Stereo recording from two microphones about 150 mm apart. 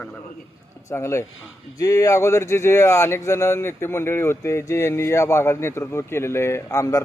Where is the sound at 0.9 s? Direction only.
20° left (ahead or behind).